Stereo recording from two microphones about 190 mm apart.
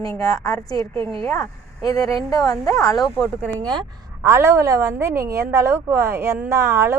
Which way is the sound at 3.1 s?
20° right (ahead or behind).